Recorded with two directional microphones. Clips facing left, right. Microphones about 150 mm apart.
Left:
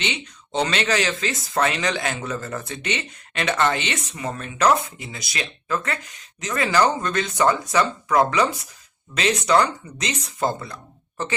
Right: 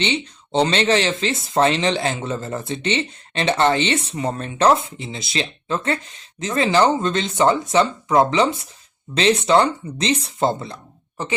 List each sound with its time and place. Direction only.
0.0 s speech: 30° right (ahead or behind)